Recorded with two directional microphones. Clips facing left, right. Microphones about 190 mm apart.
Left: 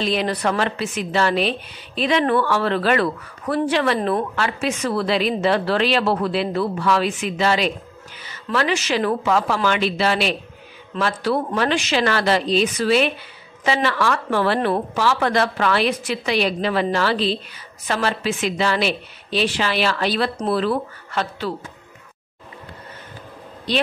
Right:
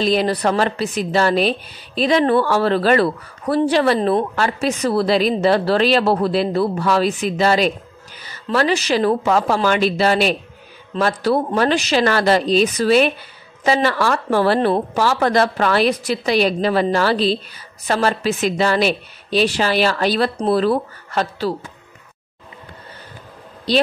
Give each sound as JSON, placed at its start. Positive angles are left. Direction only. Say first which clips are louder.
{"t": 0.0, "sound": "a woman's voice", "louder": "right 4 dB", "side_deg": -40}
{"t": 23.7, "sound": "a woman's voice", "louder": "right 5 dB", "side_deg": -35}